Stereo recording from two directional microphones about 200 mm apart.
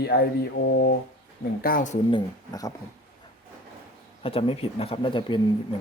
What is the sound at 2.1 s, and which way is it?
Speech, 20° left (ahead or behind).